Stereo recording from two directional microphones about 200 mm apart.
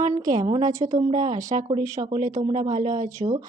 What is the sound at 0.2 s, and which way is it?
Speech, 20° right (ahead or behind).